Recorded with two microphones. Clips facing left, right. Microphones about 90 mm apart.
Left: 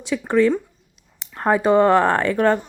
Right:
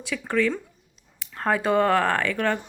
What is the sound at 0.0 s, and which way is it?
Speech, 25° left (ahead or behind).